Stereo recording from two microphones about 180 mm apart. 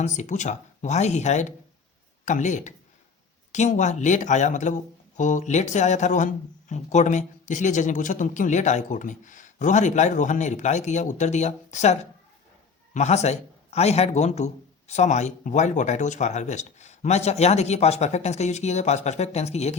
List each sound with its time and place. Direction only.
0.0 s a man's voice: 40° left (ahead or behind)